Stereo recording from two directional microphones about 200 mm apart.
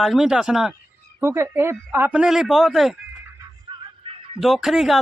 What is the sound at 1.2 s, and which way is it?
Speech, 15° right (ahead or behind).